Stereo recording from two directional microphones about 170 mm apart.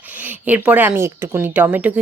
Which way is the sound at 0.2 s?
10° right (ahead or behind).